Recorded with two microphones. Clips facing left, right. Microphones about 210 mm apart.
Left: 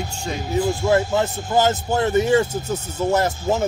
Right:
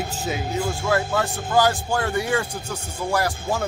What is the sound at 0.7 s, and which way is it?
Speech, 20° left (ahead or behind).